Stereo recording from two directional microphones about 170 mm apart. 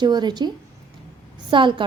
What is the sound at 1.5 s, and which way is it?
Speech, 30° right (ahead or behind).